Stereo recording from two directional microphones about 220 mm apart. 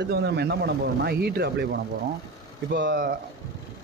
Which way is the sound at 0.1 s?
50° right (ahead or behind).